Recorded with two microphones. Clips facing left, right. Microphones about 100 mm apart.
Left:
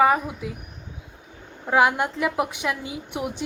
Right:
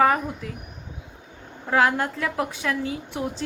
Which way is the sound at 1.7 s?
15° left (ahead or behind).